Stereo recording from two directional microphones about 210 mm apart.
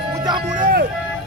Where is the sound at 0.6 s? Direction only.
45° right (ahead or behind).